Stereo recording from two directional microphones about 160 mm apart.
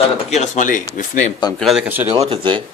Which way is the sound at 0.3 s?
45° left (ahead or behind).